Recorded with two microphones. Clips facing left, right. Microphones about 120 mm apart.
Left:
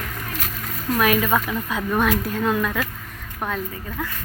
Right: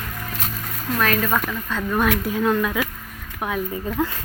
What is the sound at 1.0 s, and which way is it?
Speech, 10° left (ahead or behind).